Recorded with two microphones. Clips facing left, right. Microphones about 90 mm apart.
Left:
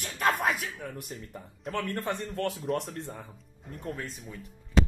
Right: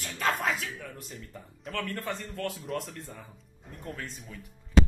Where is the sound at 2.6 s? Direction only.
65° left (ahead or behind).